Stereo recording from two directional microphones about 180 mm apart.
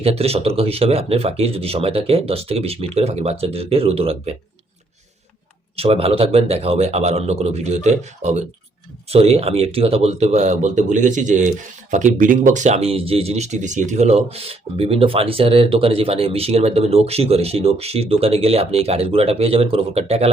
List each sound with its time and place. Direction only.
0.0 s speech: 35° right (ahead or behind)
5.7 s speech: 35° right (ahead or behind)